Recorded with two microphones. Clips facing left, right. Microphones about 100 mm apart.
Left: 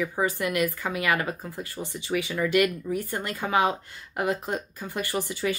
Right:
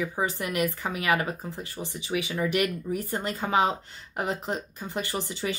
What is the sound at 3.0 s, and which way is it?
Speech, 30° right (ahead or behind).